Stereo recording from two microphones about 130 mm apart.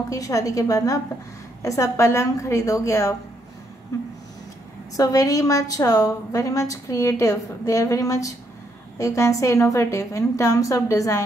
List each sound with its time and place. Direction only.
0.1 s a woman's voice: 25° left (ahead or behind)
4.9 s a woman's voice: 25° left (ahead or behind)